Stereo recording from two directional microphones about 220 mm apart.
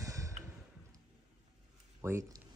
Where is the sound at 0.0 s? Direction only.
15° right (ahead or behind).